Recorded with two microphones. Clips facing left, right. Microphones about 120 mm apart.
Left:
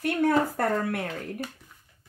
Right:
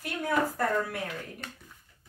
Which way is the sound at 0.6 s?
65° left (ahead or behind).